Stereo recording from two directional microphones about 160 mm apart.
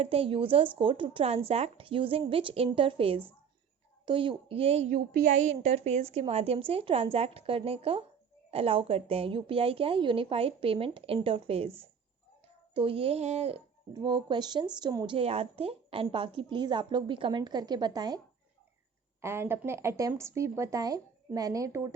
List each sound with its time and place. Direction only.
0.0 s a woman's voice: 35° right (ahead or behind)
4.9 s a woman's voice: 55° right (ahead or behind); by 11.7 s 35° right (ahead or behind)
12.7 s a woman's voice: 35° right (ahead or behind)
13.9 s a woman's voice: 30° right (ahead or behind)
19.2 s a woman's voice: 15° right (ahead or behind)